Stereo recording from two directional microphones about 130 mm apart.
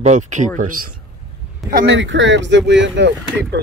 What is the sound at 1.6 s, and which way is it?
Speech, centre (ahead or behind).